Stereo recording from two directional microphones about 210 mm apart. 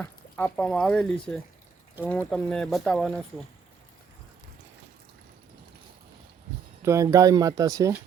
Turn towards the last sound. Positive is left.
turn(degrees=-15)  # may be behind; listen again after turning